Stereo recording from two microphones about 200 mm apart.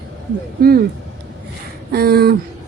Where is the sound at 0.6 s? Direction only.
50° right (ahead or behind).